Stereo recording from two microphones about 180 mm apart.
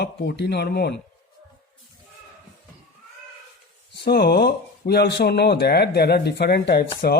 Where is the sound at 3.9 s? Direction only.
65° left (ahead or behind).